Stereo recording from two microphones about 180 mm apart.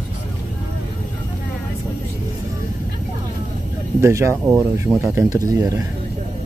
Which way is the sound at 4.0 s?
15° right (ahead or behind).